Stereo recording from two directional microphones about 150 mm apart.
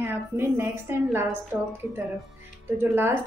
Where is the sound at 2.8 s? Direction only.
15° right (ahead or behind).